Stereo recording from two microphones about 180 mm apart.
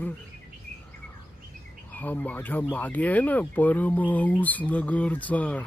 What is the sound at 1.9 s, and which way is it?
Speech, 10° left (ahead or behind).